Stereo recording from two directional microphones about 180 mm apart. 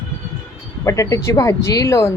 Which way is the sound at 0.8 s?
20° left (ahead or behind).